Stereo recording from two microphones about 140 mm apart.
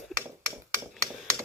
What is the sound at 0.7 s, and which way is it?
Typewriter, 20° right (ahead or behind).